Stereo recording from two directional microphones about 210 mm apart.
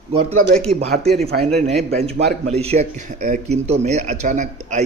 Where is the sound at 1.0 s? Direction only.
Centre (ahead or behind).